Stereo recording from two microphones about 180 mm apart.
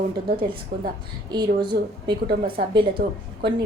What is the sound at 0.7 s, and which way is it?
Speech, 65° right (ahead or behind).